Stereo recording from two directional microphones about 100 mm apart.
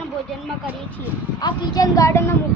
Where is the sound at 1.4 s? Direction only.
35° left (ahead or behind).